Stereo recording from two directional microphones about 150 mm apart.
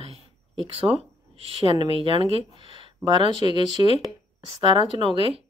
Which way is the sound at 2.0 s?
35° right (ahead or behind).